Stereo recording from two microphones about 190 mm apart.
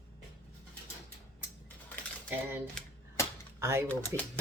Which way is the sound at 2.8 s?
5° left (ahead or behind).